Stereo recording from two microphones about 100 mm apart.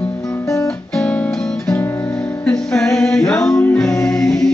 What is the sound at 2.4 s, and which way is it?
Music, 5° left (ahead or behind).